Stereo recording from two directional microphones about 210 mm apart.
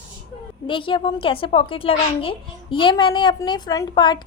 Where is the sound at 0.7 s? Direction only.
25° left (ahead or behind).